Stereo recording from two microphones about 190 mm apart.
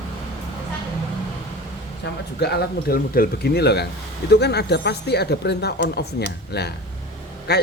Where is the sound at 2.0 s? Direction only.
65° left (ahead or behind).